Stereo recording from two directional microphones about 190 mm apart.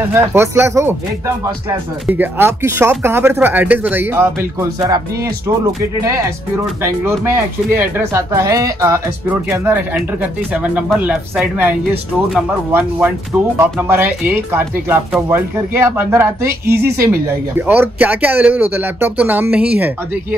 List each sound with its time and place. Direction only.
0.1 s speech: 15° right (ahead or behind)
13.6 s speech: 10° right (ahead or behind)